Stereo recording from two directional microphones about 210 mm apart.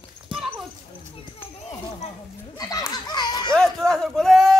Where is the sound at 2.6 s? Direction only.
15° left (ahead or behind).